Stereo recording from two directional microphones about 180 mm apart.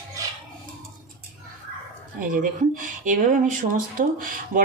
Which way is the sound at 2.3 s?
50° right (ahead or behind).